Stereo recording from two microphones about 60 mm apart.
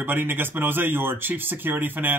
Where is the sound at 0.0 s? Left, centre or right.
Right.